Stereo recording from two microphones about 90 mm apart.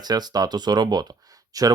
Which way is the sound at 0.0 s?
50° right (ahead or behind).